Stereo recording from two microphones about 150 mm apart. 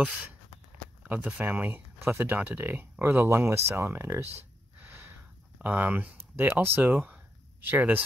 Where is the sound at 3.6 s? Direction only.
15° right (ahead or behind).